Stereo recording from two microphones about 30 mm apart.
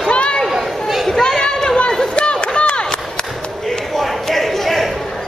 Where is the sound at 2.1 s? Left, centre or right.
Left.